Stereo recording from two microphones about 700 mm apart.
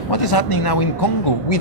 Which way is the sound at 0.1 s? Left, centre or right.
Left.